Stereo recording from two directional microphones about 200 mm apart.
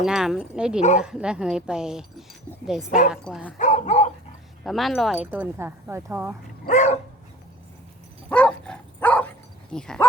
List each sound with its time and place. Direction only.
0.0 s a woman's voice: centre (ahead or behind)
3.6 s dog: 35° left (ahead or behind)
4.6 s speech: centre (ahead or behind)
6.7 s dog: 35° left (ahead or behind)
8.3 s dog: 5° left (ahead or behind)